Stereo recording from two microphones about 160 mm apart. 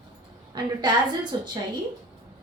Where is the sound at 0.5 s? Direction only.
30° right (ahead or behind).